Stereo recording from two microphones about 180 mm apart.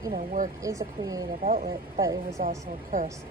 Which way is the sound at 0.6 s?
15° right (ahead or behind).